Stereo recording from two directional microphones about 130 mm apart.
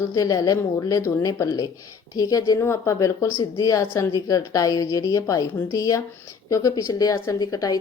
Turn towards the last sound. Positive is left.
turn(degrees=25)  # may be behind; listen again after turning